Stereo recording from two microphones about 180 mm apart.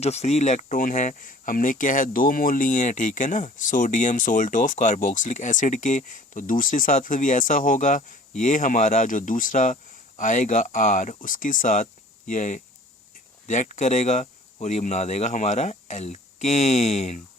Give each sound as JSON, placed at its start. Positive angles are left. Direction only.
{"t": 0.0, "sound": "speech", "side_deg": 35}